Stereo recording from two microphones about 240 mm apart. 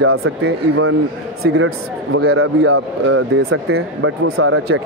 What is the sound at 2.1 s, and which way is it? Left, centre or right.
Speech, right.